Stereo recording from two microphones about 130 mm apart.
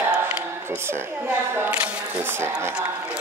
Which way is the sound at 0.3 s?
20° right (ahead or behind).